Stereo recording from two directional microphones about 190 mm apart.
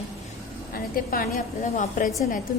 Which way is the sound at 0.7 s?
50° left (ahead or behind).